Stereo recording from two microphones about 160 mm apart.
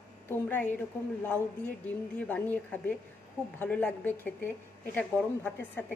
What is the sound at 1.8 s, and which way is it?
A woman's voice, 10° left (ahead or behind).